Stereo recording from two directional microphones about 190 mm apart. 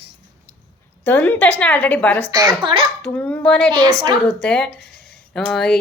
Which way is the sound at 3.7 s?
20° right (ahead or behind).